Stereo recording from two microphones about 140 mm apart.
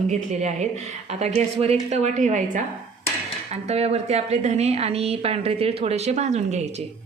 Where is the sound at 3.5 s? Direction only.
50° right (ahead or behind).